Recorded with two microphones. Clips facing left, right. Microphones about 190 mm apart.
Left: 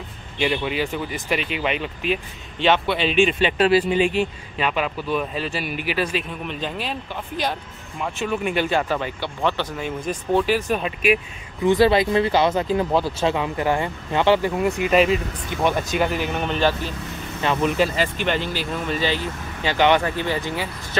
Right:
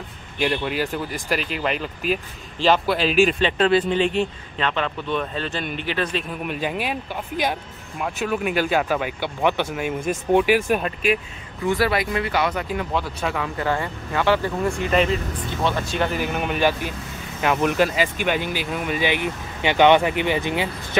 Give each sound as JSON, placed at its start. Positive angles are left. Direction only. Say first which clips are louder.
{"t": 0.4, "sound": "speech", "louder": "even", "side_deg": 0}
{"t": 3.4, "sound": "speech", "louder": "left 1 dB", "side_deg": 10}
{"t": 6.4, "sound": "speech", "louder": "right 3 dB", "side_deg": -10}
{"t": 11.6, "sound": "speech", "louder": "left 5 dB", "side_deg": 20}
{"t": 16.2, "sound": "speech", "louder": "even", "side_deg": -10}